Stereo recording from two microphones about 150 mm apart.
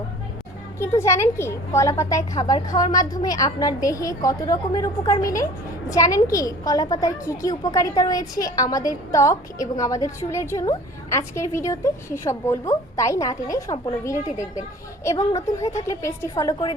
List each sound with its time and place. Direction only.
0.8 s a woman's voice: 20° left (ahead or behind)